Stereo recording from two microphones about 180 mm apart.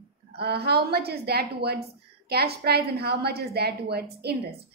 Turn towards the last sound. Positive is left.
turn(degrees=-60)  # may be behind; listen again after turning